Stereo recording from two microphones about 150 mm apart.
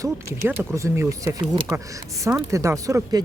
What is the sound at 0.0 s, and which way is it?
Speech, 15° right (ahead or behind).